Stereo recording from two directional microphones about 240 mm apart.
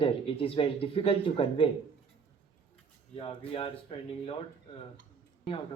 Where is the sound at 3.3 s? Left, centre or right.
Left.